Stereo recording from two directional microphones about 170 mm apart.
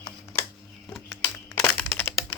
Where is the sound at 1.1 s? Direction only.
15° left (ahead or behind).